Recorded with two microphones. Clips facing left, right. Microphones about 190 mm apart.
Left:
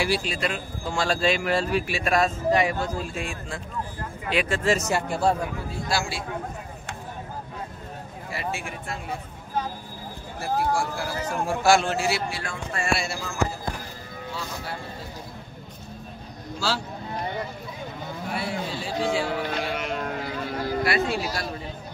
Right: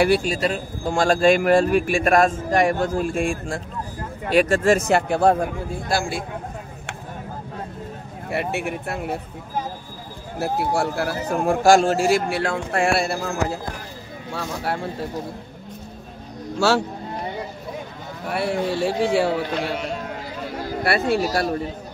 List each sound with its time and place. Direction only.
0.0 s a man's voice: 50° right (ahead or behind)
8.3 s speech: 60° right (ahead or behind)
10.7 s a man's voice: 65° right (ahead or behind); by 12.2 s 40° right (ahead or behind)
12.3 s speech: 65° right (ahead or behind)
16.5 s a man's voice: 75° right (ahead or behind)
18.3 s a man's voice: 60° right (ahead or behind)
20.8 s speech: 60° right (ahead or behind)